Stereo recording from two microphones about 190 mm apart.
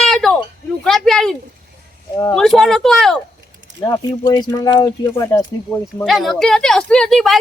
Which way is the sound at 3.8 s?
20° left (ahead or behind).